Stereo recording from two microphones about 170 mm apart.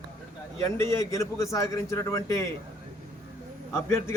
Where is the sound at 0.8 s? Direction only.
15° left (ahead or behind).